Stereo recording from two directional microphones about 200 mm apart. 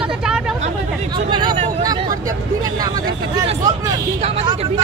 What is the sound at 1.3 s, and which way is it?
Speech, 25° right (ahead or behind).